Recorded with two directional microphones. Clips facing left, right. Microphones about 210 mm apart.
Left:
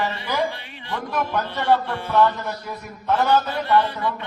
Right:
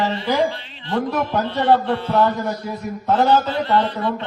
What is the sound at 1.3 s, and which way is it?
Speech, 20° right (ahead or behind).